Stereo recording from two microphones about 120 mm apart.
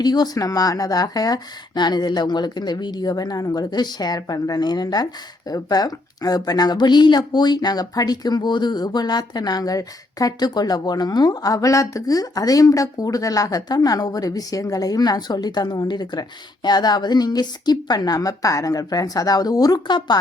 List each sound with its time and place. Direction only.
0.0 s speech: 35° left (ahead or behind)